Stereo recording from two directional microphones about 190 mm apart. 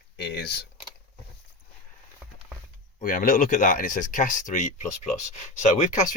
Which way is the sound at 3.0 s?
45° left (ahead or behind).